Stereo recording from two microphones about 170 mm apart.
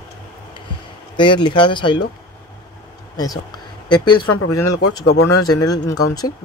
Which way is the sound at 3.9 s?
25° left (ahead or behind).